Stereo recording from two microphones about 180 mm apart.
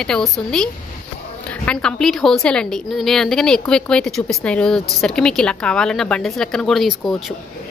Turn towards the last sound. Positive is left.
turn(degrees=0)  # may be behind; listen again after turning